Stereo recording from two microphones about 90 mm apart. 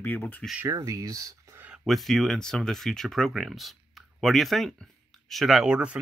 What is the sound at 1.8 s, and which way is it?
Speech, centre (ahead or behind).